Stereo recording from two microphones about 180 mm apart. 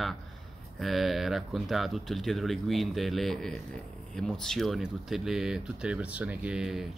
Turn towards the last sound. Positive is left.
turn(degrees=-5)  # may be behind; listen again after turning